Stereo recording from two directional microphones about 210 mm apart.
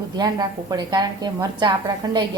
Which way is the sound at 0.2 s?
20° right (ahead or behind).